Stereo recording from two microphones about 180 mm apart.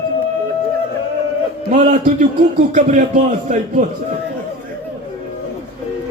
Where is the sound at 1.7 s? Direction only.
45° right (ahead or behind).